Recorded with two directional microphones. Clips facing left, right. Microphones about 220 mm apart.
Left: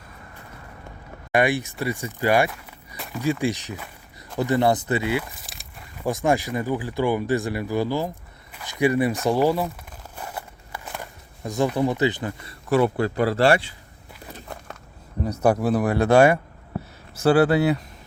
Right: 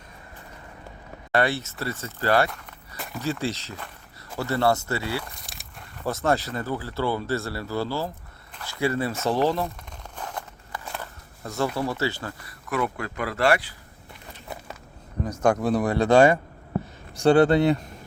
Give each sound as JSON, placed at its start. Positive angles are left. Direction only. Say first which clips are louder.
{"t": 1.3, "sound": "speech", "louder": "left 3 dB", "side_deg": 15}
{"t": 2.5, "sound": "walk", "louder": "left 1 dB", "side_deg": 5}
{"t": 3.2, "sound": "speech", "louder": "left 5 dB", "side_deg": 15}
{"t": 5.2, "sound": "speech", "louder": "left 1 dB", "side_deg": 5}
{"t": 10.2, "sound": "walk", "louder": "even", "side_deg": 10}
{"t": 12.6, "sound": "speech", "louder": "left 8 dB", "side_deg": 30}
{"t": 14.4, "sound": "walk", "louder": "right 4 dB", "side_deg": -5}
{"t": 15.2, "sound": "speech", "louder": "left 2 dB", "side_deg": 10}
{"t": 17.2, "sound": "speech", "louder": "even", "side_deg": 5}